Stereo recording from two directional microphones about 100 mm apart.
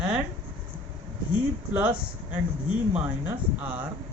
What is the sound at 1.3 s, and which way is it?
Speech, 15° right (ahead or behind).